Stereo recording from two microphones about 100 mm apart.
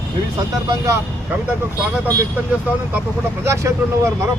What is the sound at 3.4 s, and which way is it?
Speech, 30° right (ahead or behind).